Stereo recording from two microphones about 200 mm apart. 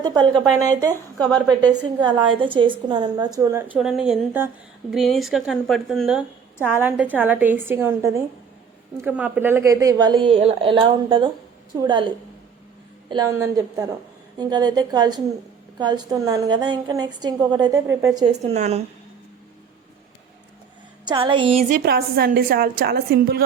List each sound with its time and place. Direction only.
0.0 s a woman's voice: 20° right (ahead or behind)
3.8 s a woman's voice: centre (ahead or behind); by 18.3 s 15° right (ahead or behind)
18.5 s a woman's voice: 35° right (ahead or behind)
21.0 s a woman's voice: 25° right (ahead or behind)
21.8 s a woman's voice: 50° right (ahead or behind)